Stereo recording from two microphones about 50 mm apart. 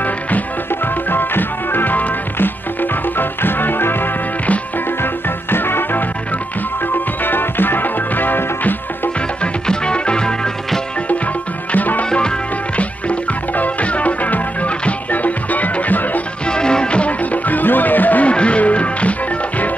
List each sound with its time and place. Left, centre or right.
1.1 s music: left
7.2 s music: left
9.4 s music: centre
11.7 s music: left
16.4 s music: centre; by 18.3 s left
18.3 s music: left